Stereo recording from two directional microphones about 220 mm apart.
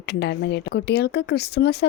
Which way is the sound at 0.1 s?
50° left (ahead or behind).